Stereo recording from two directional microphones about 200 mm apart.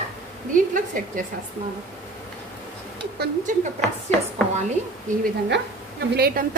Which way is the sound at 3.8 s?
5° left (ahead or behind).